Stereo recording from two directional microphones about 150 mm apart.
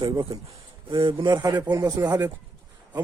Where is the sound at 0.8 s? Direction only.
35° right (ahead or behind).